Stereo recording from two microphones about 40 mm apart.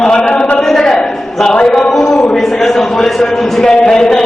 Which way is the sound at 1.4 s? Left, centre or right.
Centre.